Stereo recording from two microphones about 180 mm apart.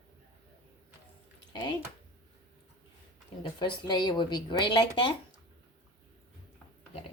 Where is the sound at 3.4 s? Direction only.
25° left (ahead or behind).